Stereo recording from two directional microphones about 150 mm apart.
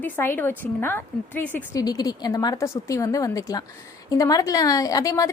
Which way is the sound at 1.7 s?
25° left (ahead or behind).